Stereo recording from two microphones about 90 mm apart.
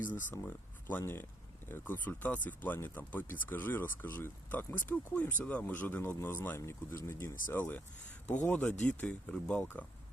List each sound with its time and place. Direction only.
0.0 s speech: 20° left (ahead or behind)